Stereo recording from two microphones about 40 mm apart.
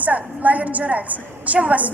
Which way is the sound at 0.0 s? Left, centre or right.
Right.